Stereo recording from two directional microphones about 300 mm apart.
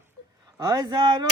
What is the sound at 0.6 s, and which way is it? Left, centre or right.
Speech, centre.